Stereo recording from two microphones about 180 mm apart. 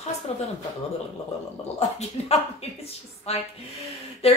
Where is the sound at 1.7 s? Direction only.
35° left (ahead or behind).